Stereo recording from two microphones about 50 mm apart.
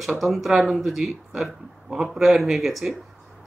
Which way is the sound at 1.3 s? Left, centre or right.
Centre.